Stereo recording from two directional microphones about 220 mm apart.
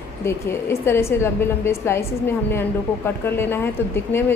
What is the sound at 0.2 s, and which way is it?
A woman's voice, 10° left (ahead or behind).